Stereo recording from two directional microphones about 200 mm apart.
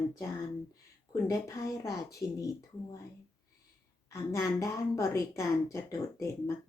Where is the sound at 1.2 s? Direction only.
15° left (ahead or behind).